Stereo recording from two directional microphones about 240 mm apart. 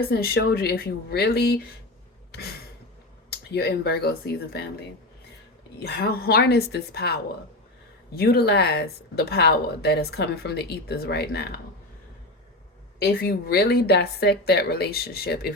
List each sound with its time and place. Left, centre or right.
0.1 s speech: left
3.2 s speech: left
5.8 s speech: left
13.0 s speech: left